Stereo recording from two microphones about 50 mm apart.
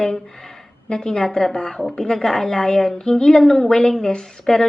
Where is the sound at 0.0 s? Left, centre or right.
Centre.